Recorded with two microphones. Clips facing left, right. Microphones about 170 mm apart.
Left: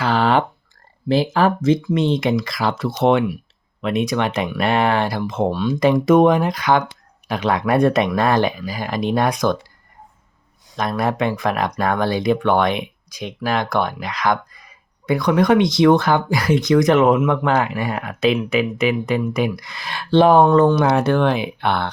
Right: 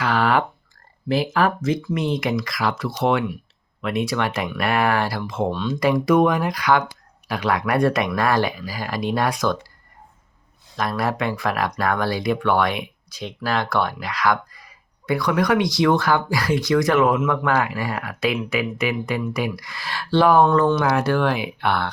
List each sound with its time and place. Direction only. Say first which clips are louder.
0.0 s a sound: left 3 dB; 30° left (ahead or behind)
1.0 s speech: left 3 dB; 25° left (ahead or behind)
5.5 s speech: left 4 dB; 10° left (ahead or behind)
5.8 s speech: left 4 dB; 25° left (ahead or behind)
10.8 s speech: left 3 dB; 20° left (ahead or behind)